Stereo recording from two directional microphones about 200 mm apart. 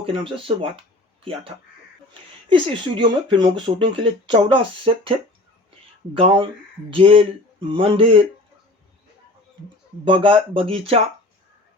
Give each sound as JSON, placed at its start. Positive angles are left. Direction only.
{"t": 0.0, "sound": "speech", "side_deg": -25}
{"t": 2.5, "sound": "speech", "side_deg": -25}
{"t": 6.1, "sound": "speech", "side_deg": -25}
{"t": 10.0, "sound": "speech", "side_deg": -25}